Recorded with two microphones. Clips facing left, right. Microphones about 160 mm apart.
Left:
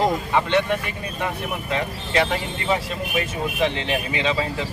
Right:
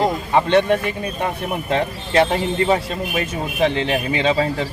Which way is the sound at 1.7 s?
35° right (ahead or behind).